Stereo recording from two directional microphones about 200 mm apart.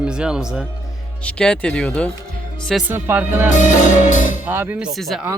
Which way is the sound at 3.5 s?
40° left (ahead or behind).